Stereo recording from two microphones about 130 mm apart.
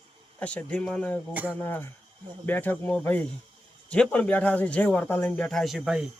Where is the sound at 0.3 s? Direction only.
10° left (ahead or behind).